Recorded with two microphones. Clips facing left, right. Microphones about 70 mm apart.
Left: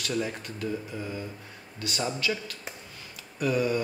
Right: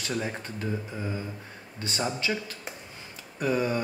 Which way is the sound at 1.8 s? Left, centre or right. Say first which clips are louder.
Even; right.